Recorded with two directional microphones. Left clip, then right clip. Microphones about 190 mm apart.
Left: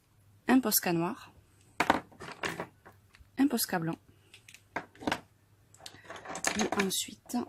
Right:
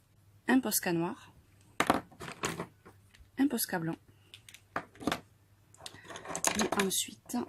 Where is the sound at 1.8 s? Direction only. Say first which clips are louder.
Left 1 dB; 40° right (ahead or behind).